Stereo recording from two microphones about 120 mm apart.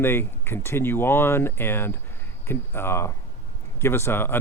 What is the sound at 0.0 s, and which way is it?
Speech, 20° left (ahead or behind).